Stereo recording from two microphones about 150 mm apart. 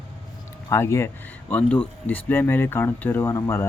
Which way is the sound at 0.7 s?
20° left (ahead or behind).